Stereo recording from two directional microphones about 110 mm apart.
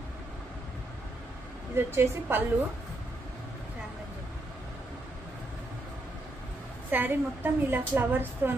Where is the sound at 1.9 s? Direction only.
20° right (ahead or behind).